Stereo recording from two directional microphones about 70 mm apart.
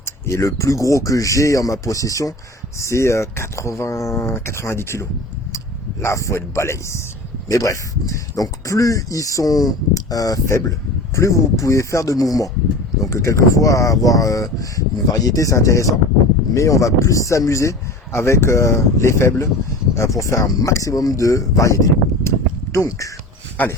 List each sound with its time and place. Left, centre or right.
0.0 s speech: left
7.4 s speech: left